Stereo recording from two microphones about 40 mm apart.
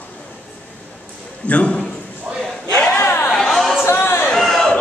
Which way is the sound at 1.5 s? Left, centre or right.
Left.